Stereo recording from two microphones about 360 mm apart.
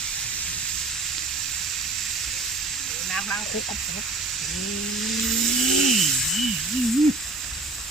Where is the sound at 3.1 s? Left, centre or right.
Centre.